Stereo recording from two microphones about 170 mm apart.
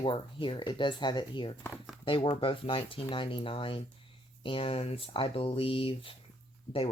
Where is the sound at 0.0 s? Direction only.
30° left (ahead or behind).